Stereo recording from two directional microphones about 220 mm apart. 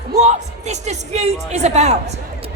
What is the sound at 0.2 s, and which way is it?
A woman's voice, 30° right (ahead or behind).